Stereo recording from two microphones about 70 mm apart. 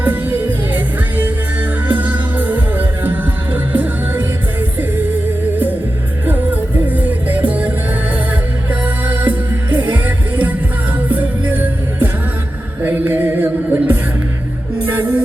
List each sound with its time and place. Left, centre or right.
0.0 s music: right
6.2 s music: right
8.8 s music: right